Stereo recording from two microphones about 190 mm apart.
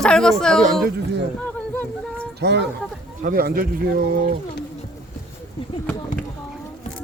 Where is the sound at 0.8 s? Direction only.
65° right (ahead or behind).